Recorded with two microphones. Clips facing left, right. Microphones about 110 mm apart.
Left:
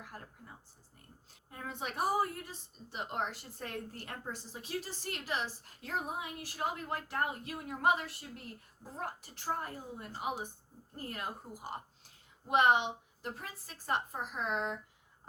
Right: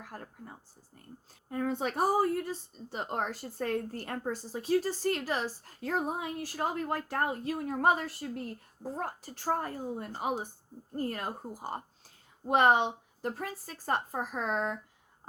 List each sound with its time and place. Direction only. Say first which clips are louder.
0.0 s a woman's voice: right 5 dB; 40° right (ahead or behind)